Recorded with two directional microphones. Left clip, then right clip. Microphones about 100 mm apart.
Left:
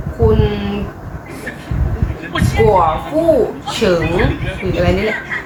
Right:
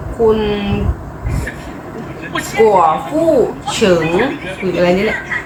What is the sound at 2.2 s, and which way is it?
Speech, centre (ahead or behind).